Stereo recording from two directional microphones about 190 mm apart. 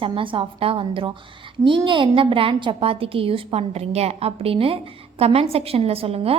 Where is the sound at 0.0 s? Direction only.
25° right (ahead or behind).